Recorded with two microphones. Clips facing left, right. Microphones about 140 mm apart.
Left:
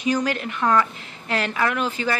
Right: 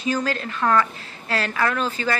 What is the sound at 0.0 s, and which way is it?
Speech, 15° left (ahead or behind).